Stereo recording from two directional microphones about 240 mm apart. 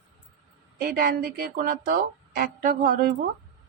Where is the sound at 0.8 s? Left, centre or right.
Right.